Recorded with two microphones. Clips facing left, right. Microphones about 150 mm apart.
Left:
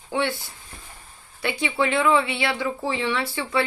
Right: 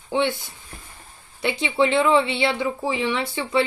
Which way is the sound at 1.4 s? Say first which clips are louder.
Right 3 dB; 20° right (ahead or behind).